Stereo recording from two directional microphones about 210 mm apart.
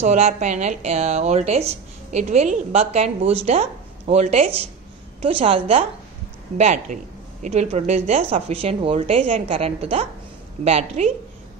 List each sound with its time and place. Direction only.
0.0 s a woman's voice: 35° right (ahead or behind)